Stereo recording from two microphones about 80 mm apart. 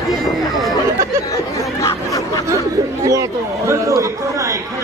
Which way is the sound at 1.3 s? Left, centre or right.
Left.